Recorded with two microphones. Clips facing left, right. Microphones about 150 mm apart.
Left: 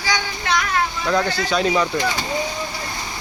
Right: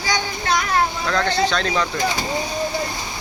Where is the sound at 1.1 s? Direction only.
10° left (ahead or behind).